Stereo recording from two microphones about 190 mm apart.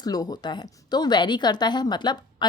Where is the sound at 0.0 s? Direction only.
20° left (ahead or behind).